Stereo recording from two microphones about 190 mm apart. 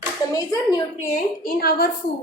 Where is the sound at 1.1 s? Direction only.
50° left (ahead or behind).